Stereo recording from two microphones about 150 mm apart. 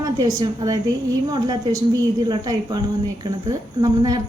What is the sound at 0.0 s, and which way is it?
A woman's voice, 25° right (ahead or behind).